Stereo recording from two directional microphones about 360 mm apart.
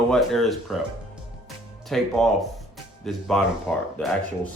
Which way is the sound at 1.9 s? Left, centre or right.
Centre.